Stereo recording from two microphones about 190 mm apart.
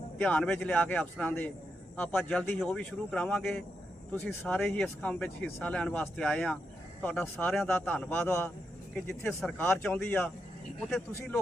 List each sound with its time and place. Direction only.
0.2 s a man's voice: 5° left (ahead or behind)